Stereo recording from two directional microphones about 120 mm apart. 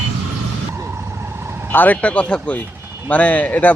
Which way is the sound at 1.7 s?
15° left (ahead or behind).